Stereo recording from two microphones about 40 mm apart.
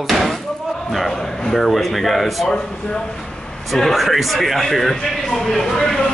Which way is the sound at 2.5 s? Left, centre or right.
Centre.